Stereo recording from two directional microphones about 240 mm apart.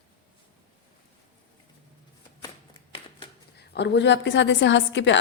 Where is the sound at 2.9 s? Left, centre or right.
Left.